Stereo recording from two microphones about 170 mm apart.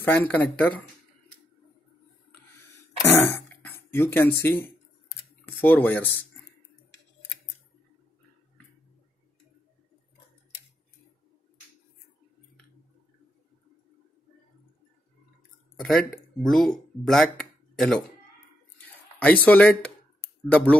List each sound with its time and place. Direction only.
0.0 s speech: 10° left (ahead or behind)
3.0 s throat clearing: 15° left (ahead or behind)
3.9 s speech: 10° left (ahead or behind)
5.4 s speech: 10° left (ahead or behind)
15.7 s a sound: centre (ahead or behind)
16.4 s speech: centre (ahead or behind)
18.8 s a sound: 10° left (ahead or behind)
20.4 s speech: 10° left (ahead or behind)